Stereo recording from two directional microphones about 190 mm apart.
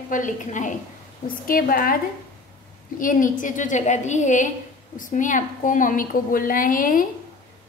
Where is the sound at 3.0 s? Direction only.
45° left (ahead or behind).